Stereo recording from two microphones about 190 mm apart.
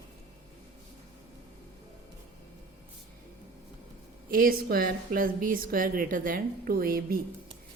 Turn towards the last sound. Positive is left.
turn(degrees=-50)  # may be behind; listen again after turning